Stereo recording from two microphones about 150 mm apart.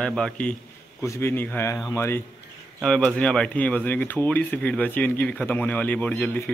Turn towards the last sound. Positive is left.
turn(degrees=10)  # may be behind; listen again after turning